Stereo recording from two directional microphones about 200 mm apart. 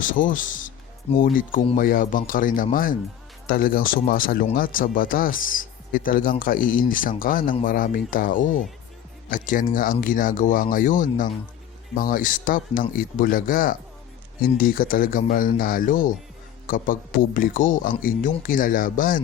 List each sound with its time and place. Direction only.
0.0 s speech: 40° left (ahead or behind)